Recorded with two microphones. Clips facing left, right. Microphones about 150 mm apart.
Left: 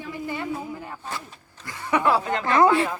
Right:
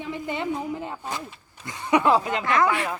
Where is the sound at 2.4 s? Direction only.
30° left (ahead or behind).